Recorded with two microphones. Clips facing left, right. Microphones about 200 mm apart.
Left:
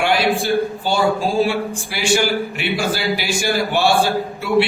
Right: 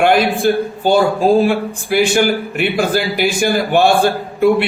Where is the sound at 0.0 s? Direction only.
55° right (ahead or behind).